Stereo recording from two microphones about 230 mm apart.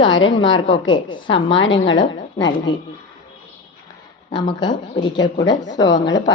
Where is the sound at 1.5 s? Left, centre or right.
Left.